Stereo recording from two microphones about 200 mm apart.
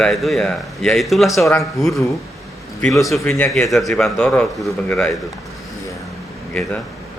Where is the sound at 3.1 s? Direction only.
5° left (ahead or behind).